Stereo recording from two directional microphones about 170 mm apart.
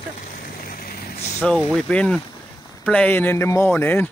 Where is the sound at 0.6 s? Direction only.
60° left (ahead or behind).